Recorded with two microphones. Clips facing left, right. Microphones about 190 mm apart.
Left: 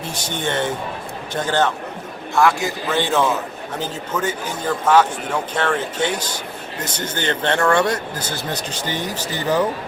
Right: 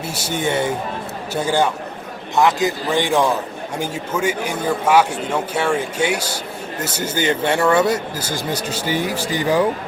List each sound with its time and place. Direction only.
0.1 s speech: 10° right (ahead or behind)